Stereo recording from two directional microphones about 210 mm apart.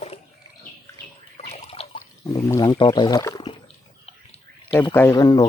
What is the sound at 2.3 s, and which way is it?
Speech, 20° left (ahead or behind).